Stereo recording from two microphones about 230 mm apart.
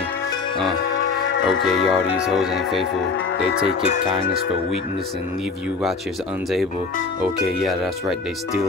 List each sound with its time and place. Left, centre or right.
1.5 s music: left
2.2 s speech: centre
7.6 s speech: centre